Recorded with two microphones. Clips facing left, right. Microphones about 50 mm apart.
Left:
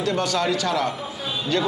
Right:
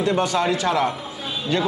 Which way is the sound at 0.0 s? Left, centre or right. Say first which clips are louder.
Right 2 dB; centre.